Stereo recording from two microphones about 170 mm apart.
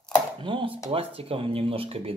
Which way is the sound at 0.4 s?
30° right (ahead or behind).